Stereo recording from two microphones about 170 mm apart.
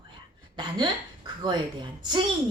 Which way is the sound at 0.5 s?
25° right (ahead or behind).